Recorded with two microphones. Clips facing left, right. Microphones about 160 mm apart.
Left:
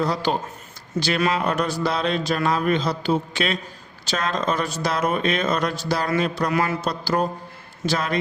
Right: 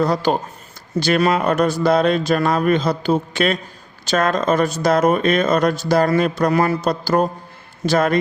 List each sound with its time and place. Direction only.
0.0 s speech: 50° right (ahead or behind)